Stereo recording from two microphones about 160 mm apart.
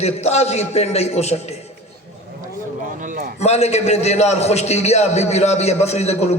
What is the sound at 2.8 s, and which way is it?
Speech, 55° right (ahead or behind).